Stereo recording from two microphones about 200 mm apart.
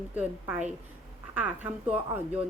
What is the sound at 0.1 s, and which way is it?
A woman's voice, 10° right (ahead or behind).